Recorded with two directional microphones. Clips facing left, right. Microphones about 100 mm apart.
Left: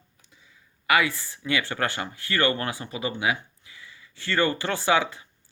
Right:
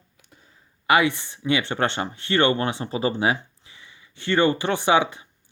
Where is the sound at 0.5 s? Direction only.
25° right (ahead or behind).